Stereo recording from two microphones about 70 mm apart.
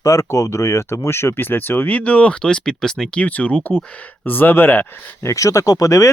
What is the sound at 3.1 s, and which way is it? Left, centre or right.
Speech, centre.